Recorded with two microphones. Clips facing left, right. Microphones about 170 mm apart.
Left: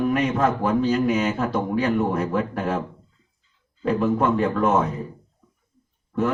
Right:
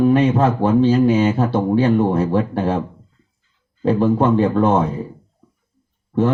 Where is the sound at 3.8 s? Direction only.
30° right (ahead or behind).